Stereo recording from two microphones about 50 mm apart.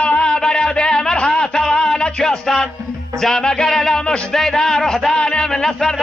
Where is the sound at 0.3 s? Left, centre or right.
Centre.